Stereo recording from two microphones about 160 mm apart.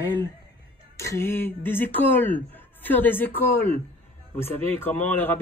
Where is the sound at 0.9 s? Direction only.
15° left (ahead or behind).